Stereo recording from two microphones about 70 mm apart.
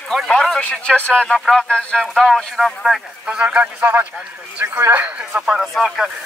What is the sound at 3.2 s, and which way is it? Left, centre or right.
Speech, centre.